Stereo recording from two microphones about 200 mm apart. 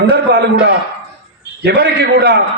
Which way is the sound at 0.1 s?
50° right (ahead or behind).